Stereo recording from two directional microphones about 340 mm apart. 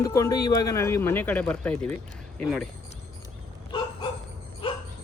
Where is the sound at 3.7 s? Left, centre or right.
Centre.